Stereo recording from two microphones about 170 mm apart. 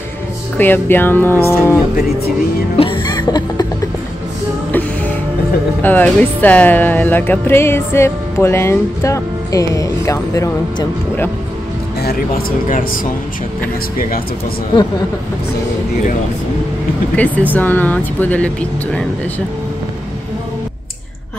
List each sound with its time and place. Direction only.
0.6 s speech: 10° left (ahead or behind)
2.8 s cough: 25° left (ahead or behind)
5.8 s speech: 10° left (ahead or behind)
12.0 s speech: 60° left (ahead or behind)
17.1 s speech: 10° left (ahead or behind)